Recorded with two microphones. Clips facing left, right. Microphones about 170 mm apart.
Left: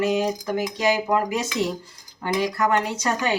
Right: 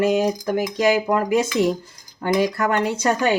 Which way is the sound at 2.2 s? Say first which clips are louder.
Right 3 dB; 50° right (ahead or behind).